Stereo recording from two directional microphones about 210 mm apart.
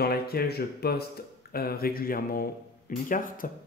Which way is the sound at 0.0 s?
50° left (ahead or behind).